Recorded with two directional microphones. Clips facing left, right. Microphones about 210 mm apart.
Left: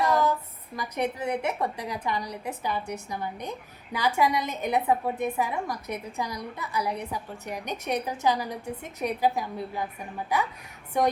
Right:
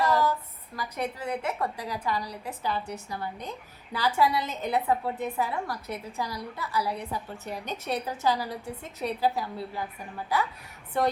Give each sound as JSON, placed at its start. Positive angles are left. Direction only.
{"t": 0.8, "sound": "a woman's voice", "side_deg": 20}